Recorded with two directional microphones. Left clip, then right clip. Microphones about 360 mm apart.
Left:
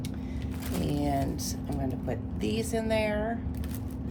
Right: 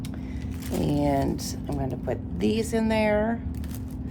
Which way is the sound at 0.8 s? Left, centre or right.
Right.